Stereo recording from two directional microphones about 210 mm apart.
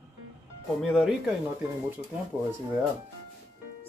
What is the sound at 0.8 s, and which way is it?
Speech, centre (ahead or behind).